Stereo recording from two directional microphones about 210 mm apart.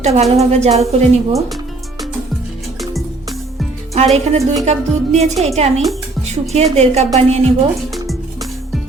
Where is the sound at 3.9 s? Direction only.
30° right (ahead or behind).